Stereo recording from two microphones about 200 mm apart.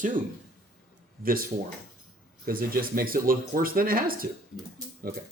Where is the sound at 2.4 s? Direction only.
45° right (ahead or behind).